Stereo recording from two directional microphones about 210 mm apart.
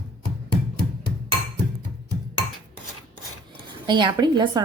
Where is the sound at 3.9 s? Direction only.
20° right (ahead or behind).